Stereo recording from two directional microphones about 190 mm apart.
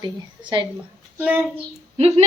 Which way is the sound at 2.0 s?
35° right (ahead or behind).